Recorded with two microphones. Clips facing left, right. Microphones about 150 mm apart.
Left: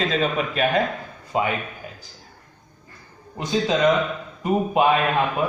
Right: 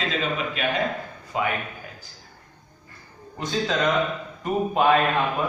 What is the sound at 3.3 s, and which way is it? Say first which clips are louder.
A man's voice: left 3 dB; 15° left (ahead or behind).